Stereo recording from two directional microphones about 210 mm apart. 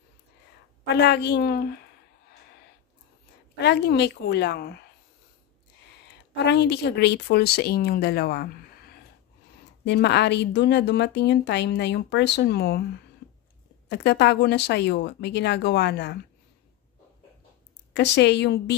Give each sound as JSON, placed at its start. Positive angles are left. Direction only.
{"t": 0.9, "sound": "a woman's voice", "side_deg": 55}
{"t": 3.5, "sound": "speech", "side_deg": 55}
{"t": 6.3, "sound": "speech", "side_deg": 55}
{"t": 9.8, "sound": "speech", "side_deg": 55}
{"t": 13.8, "sound": "speech", "side_deg": 55}
{"t": 17.9, "sound": "speech", "side_deg": 55}